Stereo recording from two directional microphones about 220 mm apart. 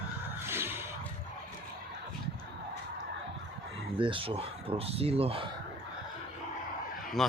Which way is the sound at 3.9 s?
25° right (ahead or behind).